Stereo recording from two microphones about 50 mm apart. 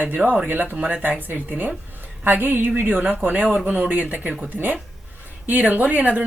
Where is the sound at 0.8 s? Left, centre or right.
Right.